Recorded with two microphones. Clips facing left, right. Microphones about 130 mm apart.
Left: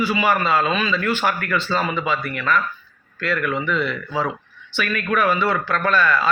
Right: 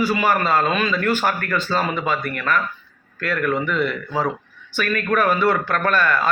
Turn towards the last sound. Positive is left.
turn(degrees=-50)  # may be behind; listen again after turning